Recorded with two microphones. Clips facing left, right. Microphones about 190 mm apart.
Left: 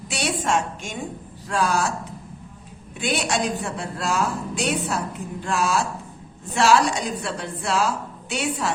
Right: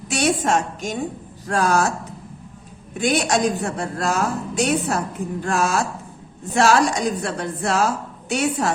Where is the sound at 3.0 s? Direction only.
45° right (ahead or behind).